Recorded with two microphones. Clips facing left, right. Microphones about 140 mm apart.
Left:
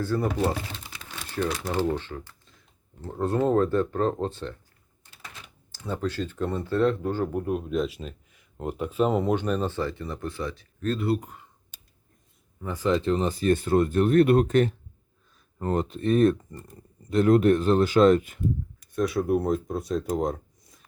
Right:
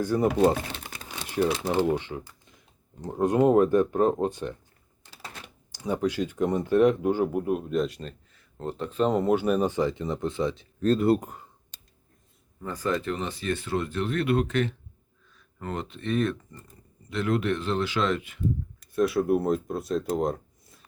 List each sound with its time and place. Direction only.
0.0 s speech: 15° right (ahead or behind)
1.0 s a sound: 15° right (ahead or behind)
1.5 s speech: 20° right (ahead or behind)
5.7 s speech: 15° right (ahead or behind); by 8.1 s centre (ahead or behind)
8.3 s speech: 15° left (ahead or behind); by 10.7 s 20° right (ahead or behind)
10.8 s speech: 40° right (ahead or behind)
12.6 s speech: 15° left (ahead or behind)
13.0 s speech: 30° left (ahead or behind)
13.2 s speech: 45° left (ahead or behind)
18.8 s speech: centre (ahead or behind)